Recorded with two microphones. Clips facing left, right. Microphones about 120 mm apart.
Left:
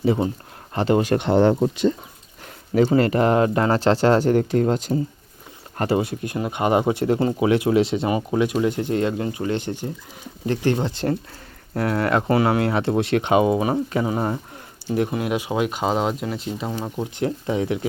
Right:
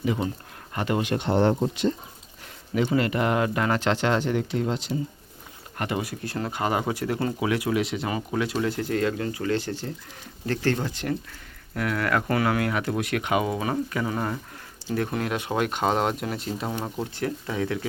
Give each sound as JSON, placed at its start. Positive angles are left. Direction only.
{"t": 0.0, "sound": "speech", "side_deg": 35}
{"t": 1.1, "sound": "speech", "side_deg": 70}
{"t": 2.7, "sound": "speech", "side_deg": 40}
{"t": 5.7, "sound": "speech", "side_deg": 35}
{"t": 17.2, "sound": "speech", "side_deg": 25}